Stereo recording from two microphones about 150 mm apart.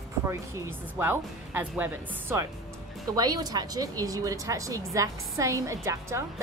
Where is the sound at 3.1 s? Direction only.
25° right (ahead or behind).